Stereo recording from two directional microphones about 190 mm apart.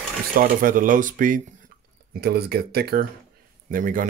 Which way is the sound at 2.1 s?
55° right (ahead or behind).